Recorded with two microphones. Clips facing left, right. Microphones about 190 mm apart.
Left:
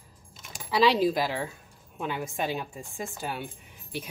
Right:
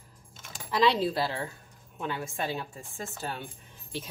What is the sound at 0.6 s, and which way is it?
Speech, 10° left (ahead or behind).